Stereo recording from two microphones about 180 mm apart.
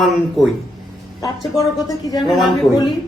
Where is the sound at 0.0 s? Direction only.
Centre (ahead or behind).